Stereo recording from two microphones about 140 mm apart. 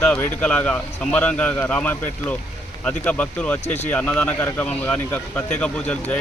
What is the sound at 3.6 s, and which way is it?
Speech, 55° left (ahead or behind).